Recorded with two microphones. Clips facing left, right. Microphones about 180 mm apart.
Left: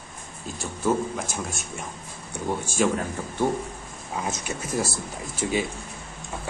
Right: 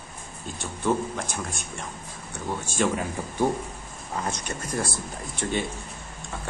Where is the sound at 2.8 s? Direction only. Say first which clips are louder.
Left 1 dB; 10° right (ahead or behind).